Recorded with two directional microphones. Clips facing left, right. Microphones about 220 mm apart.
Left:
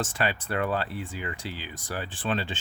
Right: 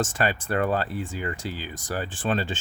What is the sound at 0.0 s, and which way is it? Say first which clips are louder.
Speech: right 3 dB; 45° right (ahead or behind).